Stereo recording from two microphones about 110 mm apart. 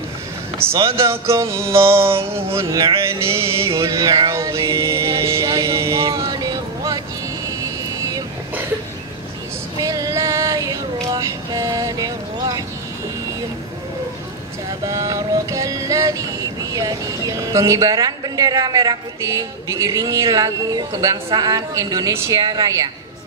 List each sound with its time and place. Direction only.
1.0 s a sound: 25° right (ahead or behind)
3.7 s a woman's voice: 30° right (ahead or behind)
4.3 s mantra: 25° right (ahead or behind)
9.8 s female singing: 30° right (ahead or behind)
14.9 s a woman's voice: 30° right (ahead or behind)